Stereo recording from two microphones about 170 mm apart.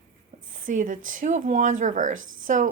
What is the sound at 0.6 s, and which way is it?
A woman's voice, 50° right (ahead or behind).